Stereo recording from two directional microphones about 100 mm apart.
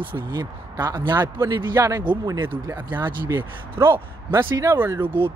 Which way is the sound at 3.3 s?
25° right (ahead or behind).